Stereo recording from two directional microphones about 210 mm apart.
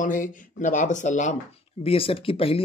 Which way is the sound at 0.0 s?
40° left (ahead or behind).